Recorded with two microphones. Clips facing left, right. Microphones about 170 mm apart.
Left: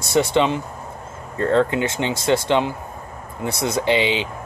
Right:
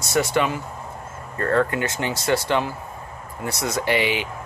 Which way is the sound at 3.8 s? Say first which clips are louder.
Left 2 dB; 20° left (ahead or behind).